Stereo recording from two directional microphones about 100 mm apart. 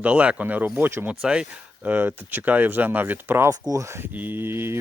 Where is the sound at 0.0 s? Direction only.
15° right (ahead or behind).